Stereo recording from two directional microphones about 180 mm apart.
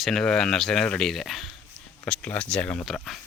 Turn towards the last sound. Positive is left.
turn(degrees=0)  # may be behind; listen again after turning